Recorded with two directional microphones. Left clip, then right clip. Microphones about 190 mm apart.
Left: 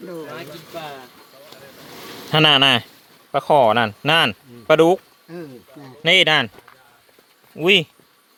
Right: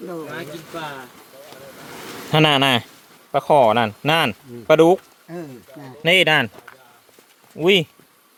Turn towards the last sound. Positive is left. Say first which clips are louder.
# left 1 dB
turn(degrees=-5)  # may be behind; listen again after turning